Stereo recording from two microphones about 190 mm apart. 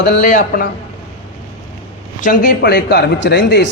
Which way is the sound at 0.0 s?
45° left (ahead or behind).